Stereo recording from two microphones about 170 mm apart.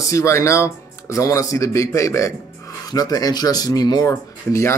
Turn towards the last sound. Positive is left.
turn(degrees=20)  # may be behind; listen again after turning